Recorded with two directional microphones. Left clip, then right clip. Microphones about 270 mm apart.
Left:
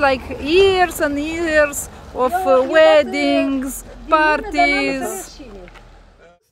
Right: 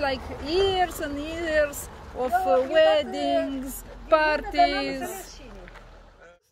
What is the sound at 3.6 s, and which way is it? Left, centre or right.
Speech, centre.